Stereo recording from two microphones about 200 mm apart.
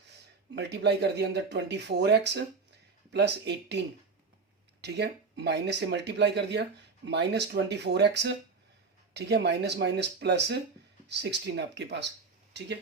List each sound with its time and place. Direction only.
0.5 s speech: 60° right (ahead or behind)
4.8 s speech: 55° right (ahead or behind)